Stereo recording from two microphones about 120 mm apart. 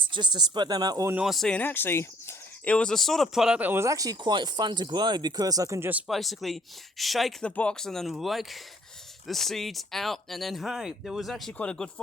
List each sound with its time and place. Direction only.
0.0 s speech: 40° right (ahead or behind)
1.1 s speech: 5° right (ahead or behind); by 2.7 s 20° left (ahead or behind)
2.7 s speech: 5° left (ahead or behind)
3.7 s speech: 25° right (ahead or behind)
6.1 s speech: centre (ahead or behind)